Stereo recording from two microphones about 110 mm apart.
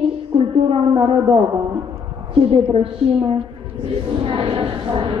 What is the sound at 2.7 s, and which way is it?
A woman's voice, 55° right (ahead or behind).